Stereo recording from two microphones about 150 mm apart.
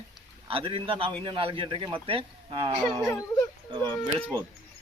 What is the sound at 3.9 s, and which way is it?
Speech, 10° left (ahead or behind).